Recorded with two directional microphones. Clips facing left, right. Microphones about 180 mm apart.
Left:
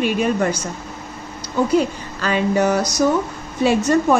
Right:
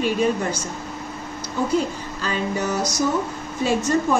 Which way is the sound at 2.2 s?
70° left (ahead or behind).